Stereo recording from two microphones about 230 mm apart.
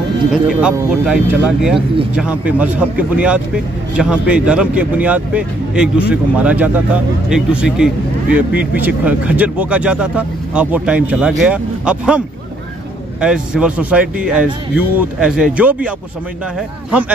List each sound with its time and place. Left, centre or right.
0.5 s speech: centre
13.2 s speech: centre